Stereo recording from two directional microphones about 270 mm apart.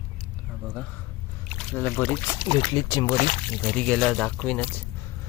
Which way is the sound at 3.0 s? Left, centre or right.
Left.